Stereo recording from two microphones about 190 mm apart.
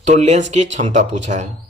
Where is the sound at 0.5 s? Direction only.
40° right (ahead or behind).